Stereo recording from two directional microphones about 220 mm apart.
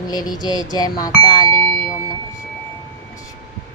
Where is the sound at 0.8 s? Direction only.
15° left (ahead or behind).